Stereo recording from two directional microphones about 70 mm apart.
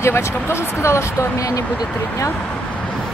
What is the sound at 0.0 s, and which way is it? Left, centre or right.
Speech, left.